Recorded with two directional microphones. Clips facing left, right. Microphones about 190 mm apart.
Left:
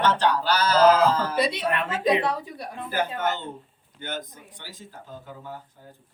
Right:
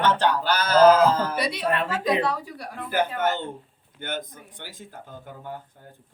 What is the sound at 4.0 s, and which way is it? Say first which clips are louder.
Speech: right 2 dB; 55° right (ahead or behind).